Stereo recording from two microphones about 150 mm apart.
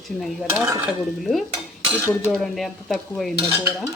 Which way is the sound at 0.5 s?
20° right (ahead or behind).